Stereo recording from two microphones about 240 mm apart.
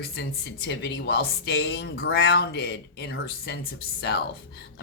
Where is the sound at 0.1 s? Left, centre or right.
Left.